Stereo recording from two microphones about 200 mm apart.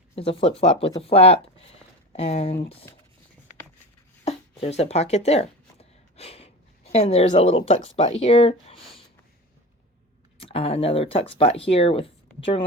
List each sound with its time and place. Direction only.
0.2 s speech: 30° left (ahead or behind)
4.3 s speech: 30° left (ahead or behind)
10.3 s speech: 30° left (ahead or behind)